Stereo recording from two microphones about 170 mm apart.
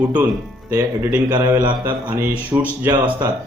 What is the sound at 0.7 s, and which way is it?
A man's voice, 15° right (ahead or behind).